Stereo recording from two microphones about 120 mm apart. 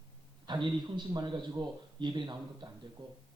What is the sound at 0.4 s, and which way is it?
Speech, 40° right (ahead or behind).